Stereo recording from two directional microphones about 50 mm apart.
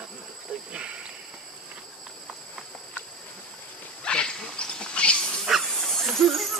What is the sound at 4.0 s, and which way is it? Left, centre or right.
Wild animals, centre.